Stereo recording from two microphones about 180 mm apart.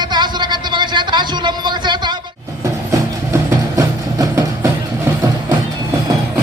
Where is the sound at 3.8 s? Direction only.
20° right (ahead or behind).